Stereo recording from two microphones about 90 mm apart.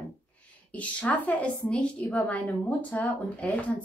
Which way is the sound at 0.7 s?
15° left (ahead or behind).